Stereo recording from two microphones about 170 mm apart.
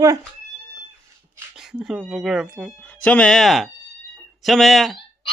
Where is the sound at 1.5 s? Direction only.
5° right (ahead or behind).